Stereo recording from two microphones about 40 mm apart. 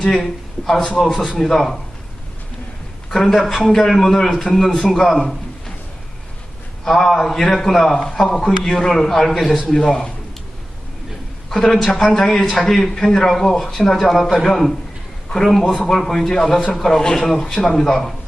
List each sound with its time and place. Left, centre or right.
0.1 s a man's voice: centre
1.1 s a man's voice: centre
1.4 s a man's voice: centre
3.1 s a man's voice: centre
6.8 s a man's voice: centre
9.8 s speech: left
11.5 s a man's voice: centre